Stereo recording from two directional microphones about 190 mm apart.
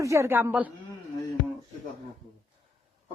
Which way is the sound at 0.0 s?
15° right (ahead or behind).